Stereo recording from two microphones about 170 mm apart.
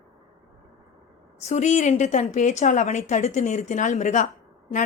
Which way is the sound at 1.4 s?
45° left (ahead or behind).